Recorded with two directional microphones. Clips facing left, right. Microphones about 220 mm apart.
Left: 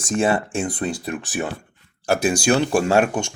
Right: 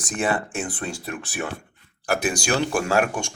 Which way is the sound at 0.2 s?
25° left (ahead or behind).